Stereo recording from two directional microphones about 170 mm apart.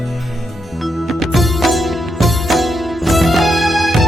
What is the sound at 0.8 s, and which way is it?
Music, centre (ahead or behind).